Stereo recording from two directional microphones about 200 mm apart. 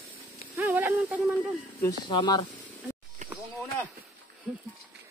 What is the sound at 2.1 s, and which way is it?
Speech, 25° left (ahead or behind).